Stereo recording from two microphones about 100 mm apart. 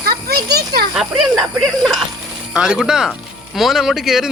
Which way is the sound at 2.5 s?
10° right (ahead or behind).